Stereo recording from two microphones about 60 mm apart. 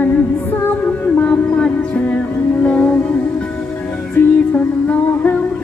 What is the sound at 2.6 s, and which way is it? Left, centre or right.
Music, left.